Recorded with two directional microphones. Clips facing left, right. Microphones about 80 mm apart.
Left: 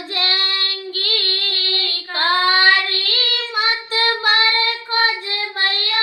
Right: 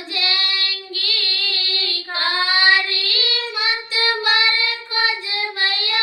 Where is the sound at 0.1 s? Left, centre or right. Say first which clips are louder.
Left 1 dB; left.